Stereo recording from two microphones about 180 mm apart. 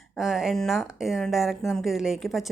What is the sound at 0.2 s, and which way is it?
A woman's voice, 5° right (ahead or behind).